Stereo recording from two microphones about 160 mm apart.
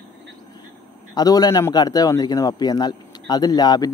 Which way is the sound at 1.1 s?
25° left (ahead or behind).